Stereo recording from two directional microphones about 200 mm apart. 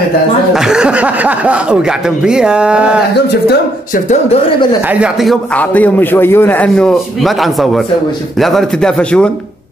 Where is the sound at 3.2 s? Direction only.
55° left (ahead or behind).